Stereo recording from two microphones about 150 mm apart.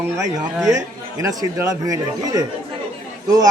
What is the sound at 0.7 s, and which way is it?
A man's voice, 20° right (ahead or behind).